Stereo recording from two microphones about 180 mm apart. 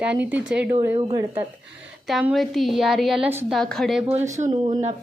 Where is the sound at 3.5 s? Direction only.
Centre (ahead or behind).